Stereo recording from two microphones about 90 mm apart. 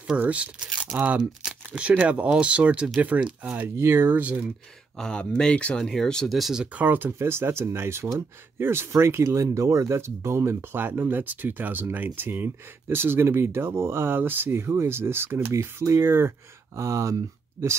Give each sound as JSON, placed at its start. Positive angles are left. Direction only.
{"t": 0.2, "sound": "speech", "side_deg": -15}
{"t": 3.5, "sound": "speech", "side_deg": -25}
{"t": 4.9, "sound": "speech", "side_deg": 10}